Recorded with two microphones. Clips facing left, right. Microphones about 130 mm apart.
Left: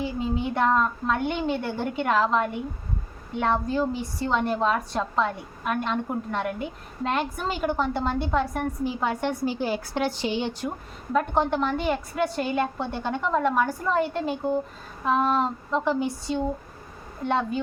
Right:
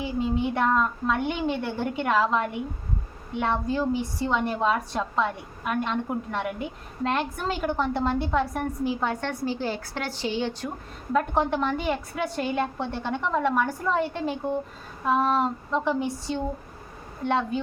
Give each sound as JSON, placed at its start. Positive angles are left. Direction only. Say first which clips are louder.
{"t": 0.0, "sound": "a woman's voice", "louder": "right 1 dB", "side_deg": 0}
{"t": 11.1, "sound": "a woman's voice", "louder": "left 1 dB", "side_deg": 0}